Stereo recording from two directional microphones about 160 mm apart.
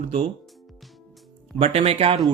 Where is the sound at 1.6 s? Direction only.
40° right (ahead or behind).